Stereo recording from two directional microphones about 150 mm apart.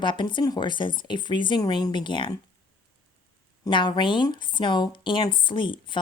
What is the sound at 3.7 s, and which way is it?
Speech, 30° left (ahead or behind).